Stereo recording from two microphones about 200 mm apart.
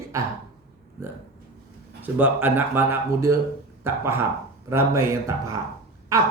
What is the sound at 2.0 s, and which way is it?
Speech, 10° right (ahead or behind).